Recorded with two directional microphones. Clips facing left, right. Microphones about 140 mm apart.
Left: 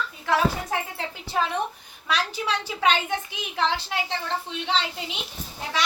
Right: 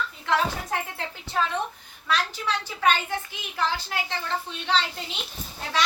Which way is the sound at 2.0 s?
15° left (ahead or behind).